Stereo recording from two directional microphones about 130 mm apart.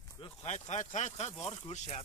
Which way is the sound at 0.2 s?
55° left (ahead or behind).